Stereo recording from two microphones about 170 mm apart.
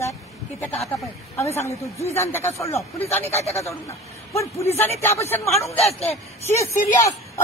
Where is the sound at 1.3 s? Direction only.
15° left (ahead or behind).